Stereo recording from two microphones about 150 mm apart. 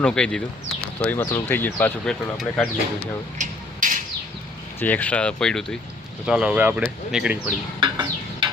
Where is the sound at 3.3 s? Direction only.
60° right (ahead or behind).